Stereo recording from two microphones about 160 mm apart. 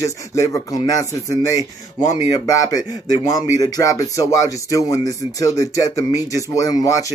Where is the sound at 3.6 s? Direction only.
20° left (ahead or behind).